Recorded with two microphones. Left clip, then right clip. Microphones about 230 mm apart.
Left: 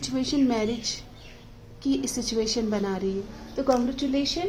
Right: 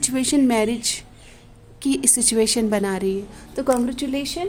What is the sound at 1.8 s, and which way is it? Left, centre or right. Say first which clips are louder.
A woman's voice: right 6 dB; right.